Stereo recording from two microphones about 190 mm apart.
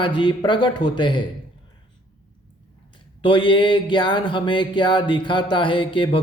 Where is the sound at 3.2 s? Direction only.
25° left (ahead or behind).